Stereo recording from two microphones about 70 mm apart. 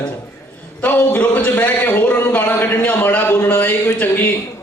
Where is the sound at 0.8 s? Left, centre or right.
Centre.